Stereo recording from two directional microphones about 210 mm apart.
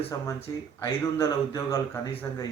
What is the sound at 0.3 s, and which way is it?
Speech, 15° left (ahead or behind).